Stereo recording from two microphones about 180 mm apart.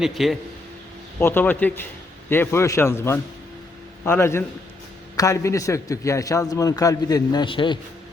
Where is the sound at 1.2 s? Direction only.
10° left (ahead or behind).